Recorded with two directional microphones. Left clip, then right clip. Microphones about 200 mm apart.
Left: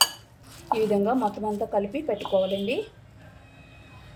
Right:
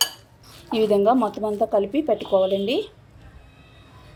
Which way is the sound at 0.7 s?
40° right (ahead or behind).